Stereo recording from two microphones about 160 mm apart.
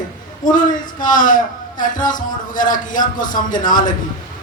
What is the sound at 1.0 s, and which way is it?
A man's voice, 55° left (ahead or behind).